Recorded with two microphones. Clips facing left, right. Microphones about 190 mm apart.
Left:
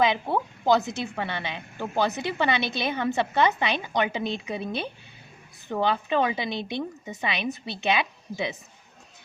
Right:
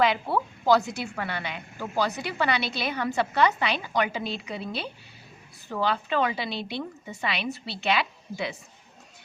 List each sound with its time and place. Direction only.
0.0 s a woman's voice: 20° left (ahead or behind)